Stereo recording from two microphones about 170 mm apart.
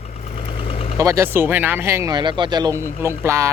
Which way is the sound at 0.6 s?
35° left (ahead or behind).